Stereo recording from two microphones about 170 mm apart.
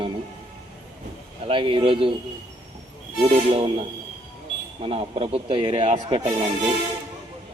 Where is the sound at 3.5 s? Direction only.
35° right (ahead or behind).